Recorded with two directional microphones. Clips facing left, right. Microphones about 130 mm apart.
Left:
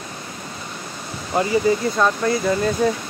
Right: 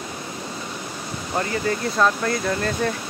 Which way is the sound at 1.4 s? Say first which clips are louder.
Left 6 dB; 15° left (ahead or behind).